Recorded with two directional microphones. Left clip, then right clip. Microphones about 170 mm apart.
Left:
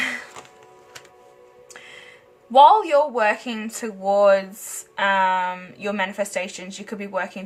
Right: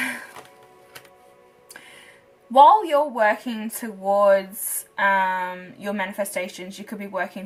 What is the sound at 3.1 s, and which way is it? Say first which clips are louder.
Speech: even; 40° left (ahead or behind).